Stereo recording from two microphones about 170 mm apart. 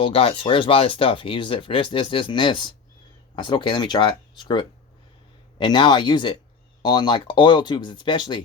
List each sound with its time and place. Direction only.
0.0 s speech: 35° left (ahead or behind)